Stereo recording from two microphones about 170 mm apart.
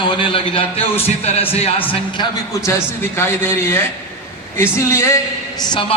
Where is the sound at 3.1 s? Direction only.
15° left (ahead or behind).